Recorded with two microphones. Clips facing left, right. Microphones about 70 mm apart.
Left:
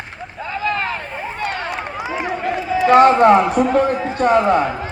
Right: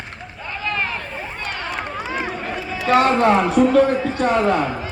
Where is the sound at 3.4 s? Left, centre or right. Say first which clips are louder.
Even; centre.